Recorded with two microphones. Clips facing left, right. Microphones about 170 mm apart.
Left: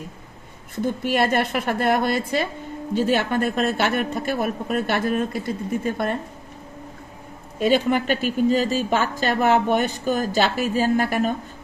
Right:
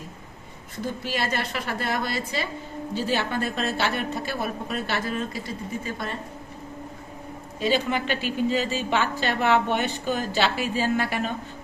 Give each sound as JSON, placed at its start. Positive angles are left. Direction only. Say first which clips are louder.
{"t": 1.0, "sound": "a woman's voice", "louder": "left 8 dB", "side_deg": 55}
{"t": 7.6, "sound": "a woman's voice", "louder": "left 5 dB", "side_deg": 50}